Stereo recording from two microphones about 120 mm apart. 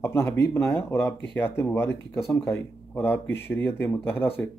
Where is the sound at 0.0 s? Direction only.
20° left (ahead or behind).